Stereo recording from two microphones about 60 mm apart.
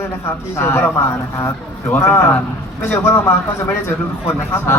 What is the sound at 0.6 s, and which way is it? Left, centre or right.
Speech, left.